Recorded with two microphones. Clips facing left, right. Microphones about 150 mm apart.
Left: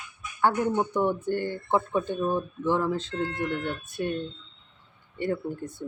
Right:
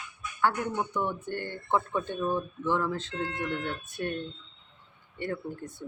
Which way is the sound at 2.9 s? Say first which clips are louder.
Left 4 dB; 35° left (ahead or behind).